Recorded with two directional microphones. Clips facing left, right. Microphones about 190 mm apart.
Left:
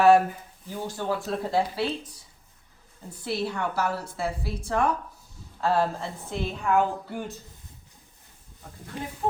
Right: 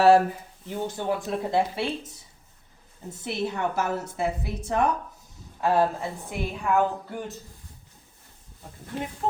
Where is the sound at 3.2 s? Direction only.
20° right (ahead or behind).